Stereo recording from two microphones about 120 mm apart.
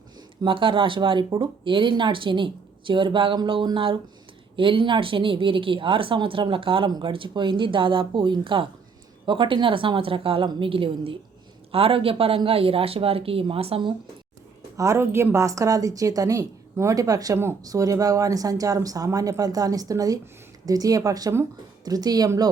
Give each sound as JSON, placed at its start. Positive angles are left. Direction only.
{"t": 0.4, "sound": "speech", "side_deg": -45}
{"t": 14.8, "sound": "a woman's voice", "side_deg": -25}